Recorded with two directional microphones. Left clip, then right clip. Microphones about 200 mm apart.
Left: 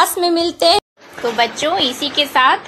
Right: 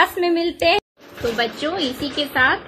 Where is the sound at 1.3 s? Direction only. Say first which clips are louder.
Left 8 dB; 55° left (ahead or behind).